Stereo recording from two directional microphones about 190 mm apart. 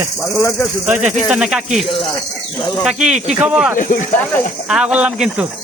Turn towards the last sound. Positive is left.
turn(degrees=-5)  # may be behind; listen again after turning